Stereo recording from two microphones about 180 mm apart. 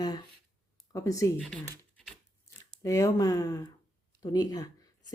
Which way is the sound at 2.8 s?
15° left (ahead or behind).